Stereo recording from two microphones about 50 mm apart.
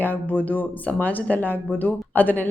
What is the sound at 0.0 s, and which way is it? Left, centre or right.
A woman's voice, left.